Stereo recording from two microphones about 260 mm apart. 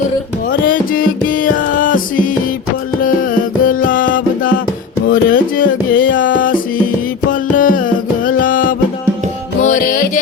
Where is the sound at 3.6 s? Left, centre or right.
Left.